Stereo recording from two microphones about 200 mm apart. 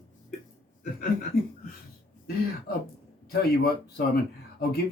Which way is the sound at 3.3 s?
50° left (ahead or behind).